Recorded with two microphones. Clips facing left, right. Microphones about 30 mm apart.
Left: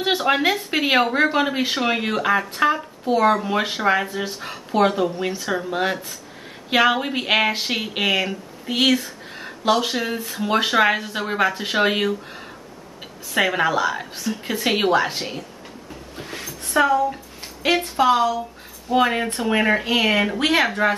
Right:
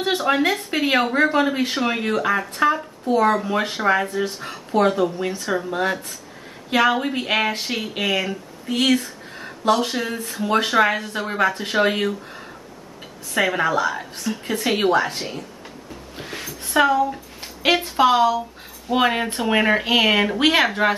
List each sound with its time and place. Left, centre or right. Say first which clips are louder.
0.0 s speech: even; centre
9.0 s a sound: even; centre
9.8 s speech: left 1 dB; centre
13.3 s speech: even; centre
16.2 s a sound: right 1 dB; centre
16.8 s speech: right 1 dB; centre